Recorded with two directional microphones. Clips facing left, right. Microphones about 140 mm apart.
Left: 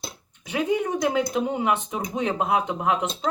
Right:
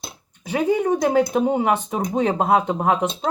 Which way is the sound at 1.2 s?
50° right (ahead or behind).